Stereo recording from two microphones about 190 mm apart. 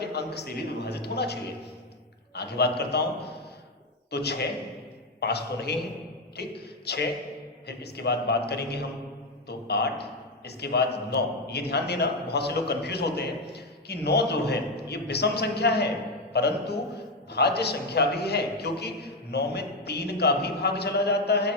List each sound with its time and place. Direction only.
0.0 s a man's voice: 60° left (ahead or behind)
4.1 s a man's voice: 60° left (ahead or behind)